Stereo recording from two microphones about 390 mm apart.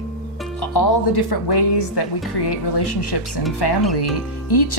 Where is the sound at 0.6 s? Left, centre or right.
Left.